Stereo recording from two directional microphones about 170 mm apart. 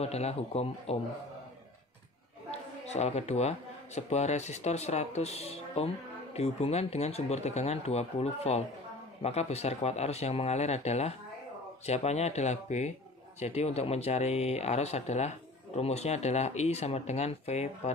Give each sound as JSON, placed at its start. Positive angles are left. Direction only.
{"t": 0.0, "sound": "speech", "side_deg": 40}
{"t": 2.5, "sound": "a man's voice", "side_deg": 40}